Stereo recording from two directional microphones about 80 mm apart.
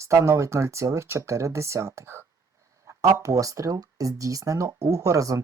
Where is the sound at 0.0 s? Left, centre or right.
Right.